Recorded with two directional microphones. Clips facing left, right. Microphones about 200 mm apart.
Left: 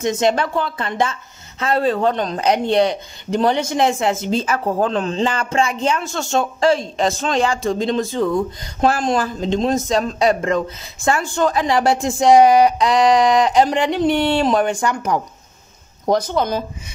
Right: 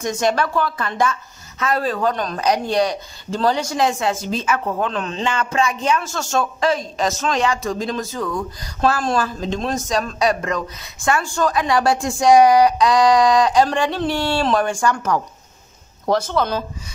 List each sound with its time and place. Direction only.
0.0 s speech: 20° left (ahead or behind)